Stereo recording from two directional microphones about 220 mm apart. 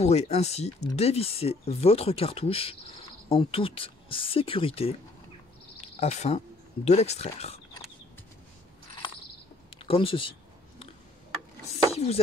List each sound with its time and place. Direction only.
0.0 s speech: 30° left (ahead or behind)
5.9 s speech: 30° left (ahead or behind)
9.7 s speech: 25° left (ahead or behind)
11.9 s chopping: 30° left (ahead or behind)